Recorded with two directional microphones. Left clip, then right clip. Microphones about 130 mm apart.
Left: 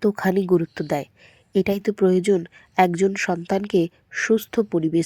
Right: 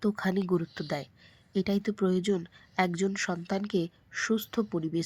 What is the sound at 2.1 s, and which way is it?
Speech, 45° left (ahead or behind).